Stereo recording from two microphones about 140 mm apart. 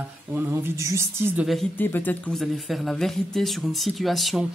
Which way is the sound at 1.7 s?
15° left (ahead or behind).